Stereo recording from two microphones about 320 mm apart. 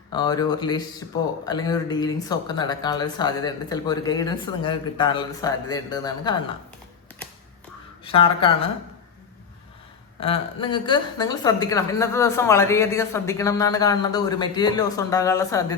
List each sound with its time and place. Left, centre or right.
0.1 s a woman's voice: centre
8.1 s a woman's voice: centre
10.2 s a woman's voice: centre